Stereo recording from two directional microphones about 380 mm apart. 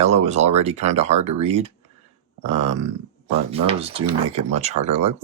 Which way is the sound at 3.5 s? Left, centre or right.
Centre.